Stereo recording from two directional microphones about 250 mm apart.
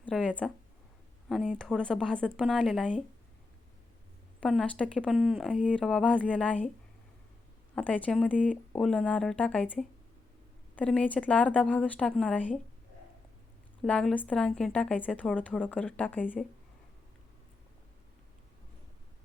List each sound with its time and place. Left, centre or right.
0.0 s speech: centre
4.4 s speech: centre
7.8 s speech: centre
13.8 s speech: centre